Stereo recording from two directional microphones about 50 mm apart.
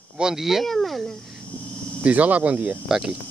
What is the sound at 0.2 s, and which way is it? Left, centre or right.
Speech, centre.